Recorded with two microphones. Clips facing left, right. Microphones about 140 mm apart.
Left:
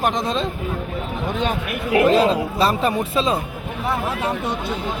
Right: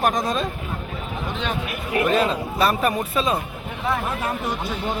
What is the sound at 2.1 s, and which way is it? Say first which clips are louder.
A man's voice: left 4 dB; 35° left (ahead or behind).